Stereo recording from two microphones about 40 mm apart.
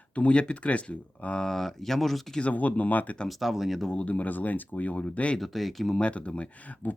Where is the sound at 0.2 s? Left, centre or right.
Left.